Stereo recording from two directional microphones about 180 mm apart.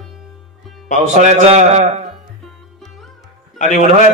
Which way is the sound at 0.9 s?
40° right (ahead or behind).